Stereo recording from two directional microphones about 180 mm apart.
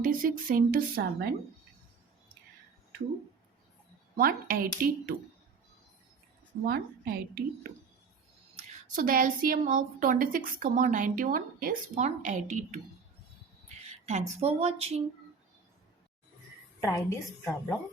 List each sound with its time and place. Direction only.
0.0 s a woman's voice: 50° right (ahead or behind)
4.2 s a woman's voice: 50° right (ahead or behind)
6.7 s a woman's voice: 60° right (ahead or behind)
8.5 s a woman's voice: 50° right (ahead or behind)
14.0 s speech: 40° right (ahead or behind)
16.8 s a woman's voice: 15° left (ahead or behind)